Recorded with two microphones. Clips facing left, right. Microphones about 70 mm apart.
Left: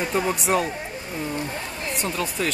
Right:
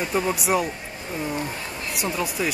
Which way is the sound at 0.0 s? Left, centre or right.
Centre.